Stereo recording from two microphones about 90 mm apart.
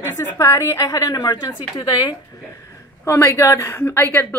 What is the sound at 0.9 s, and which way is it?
Speech, 40° left (ahead or behind).